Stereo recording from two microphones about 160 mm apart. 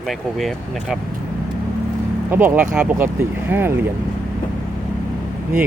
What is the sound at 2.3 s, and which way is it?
Speech, 10° right (ahead or behind).